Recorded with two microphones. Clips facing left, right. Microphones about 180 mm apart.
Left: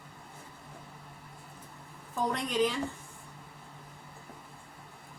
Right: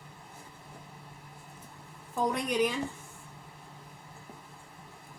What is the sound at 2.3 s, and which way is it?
Speech, 15° right (ahead or behind).